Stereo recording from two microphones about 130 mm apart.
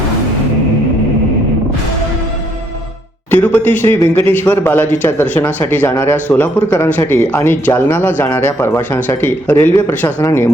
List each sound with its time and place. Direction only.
3.3 s speech: 15° left (ahead or behind)